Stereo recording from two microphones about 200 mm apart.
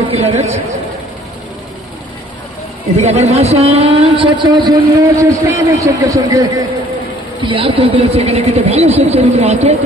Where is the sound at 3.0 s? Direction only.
30° right (ahead or behind).